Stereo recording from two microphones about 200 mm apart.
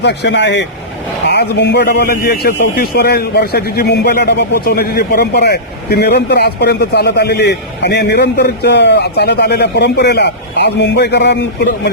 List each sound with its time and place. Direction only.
0.0 s a man's voice: 60° left (ahead or behind)